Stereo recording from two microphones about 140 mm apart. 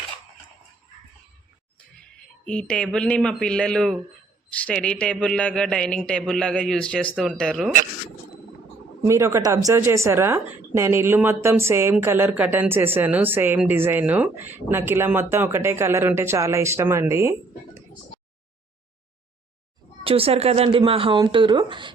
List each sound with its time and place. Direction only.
2.4 s a man's voice: 5° left (ahead or behind)
9.0 s a woman's voice: 20° right (ahead or behind)
20.1 s speech: 45° right (ahead or behind)